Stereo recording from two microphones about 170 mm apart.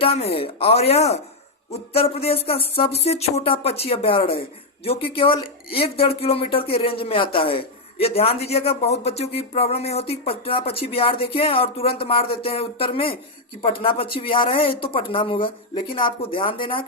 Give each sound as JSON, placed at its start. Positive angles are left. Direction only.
{"t": 0.0, "sound": "speech", "side_deg": 35}